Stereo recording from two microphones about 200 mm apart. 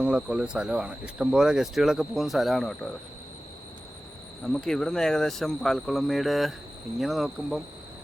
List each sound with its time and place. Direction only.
0.0 s speech: 5° right (ahead or behind)
4.4 s speech: centre (ahead or behind)